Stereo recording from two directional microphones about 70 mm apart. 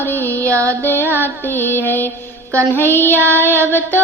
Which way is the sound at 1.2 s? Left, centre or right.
Left.